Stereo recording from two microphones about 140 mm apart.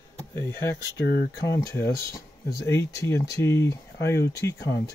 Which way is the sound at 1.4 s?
20° left (ahead or behind).